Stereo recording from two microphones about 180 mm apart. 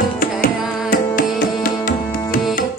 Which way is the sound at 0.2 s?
50° left (ahead or behind).